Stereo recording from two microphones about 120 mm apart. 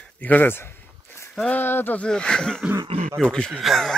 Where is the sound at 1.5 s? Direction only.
20° left (ahead or behind).